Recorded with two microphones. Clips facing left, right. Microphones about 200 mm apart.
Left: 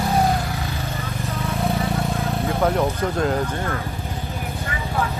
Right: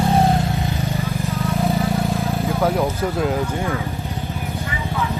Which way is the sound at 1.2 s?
Centre (ahead or behind).